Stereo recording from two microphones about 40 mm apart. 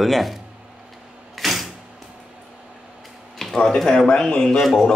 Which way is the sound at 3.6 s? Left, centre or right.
Centre.